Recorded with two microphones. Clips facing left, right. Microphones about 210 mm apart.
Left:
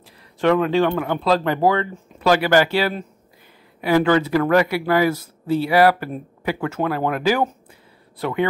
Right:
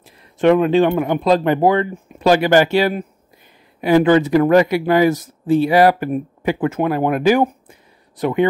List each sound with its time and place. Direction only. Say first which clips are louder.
0.4 s speech: right 4 dB; 20° right (ahead or behind)